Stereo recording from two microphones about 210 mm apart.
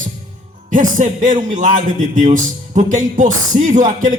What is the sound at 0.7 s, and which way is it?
Speech, 40° right (ahead or behind).